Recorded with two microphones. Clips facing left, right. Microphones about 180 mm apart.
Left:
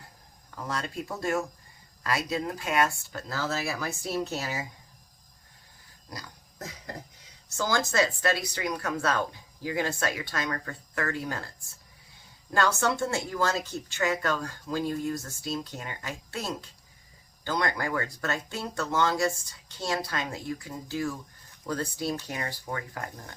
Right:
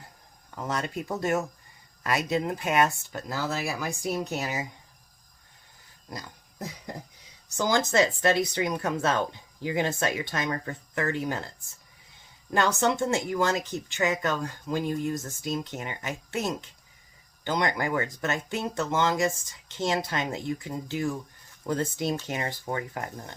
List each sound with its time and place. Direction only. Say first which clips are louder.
0.5 s speech: right 3 dB; 20° right (ahead or behind)
6.1 s pig: right 3 dB; 25° right (ahead or behind)
7.4 s speech: right 3 dB; 15° right (ahead or behind)
12.5 s speech: right 2 dB; 20° right (ahead or behind)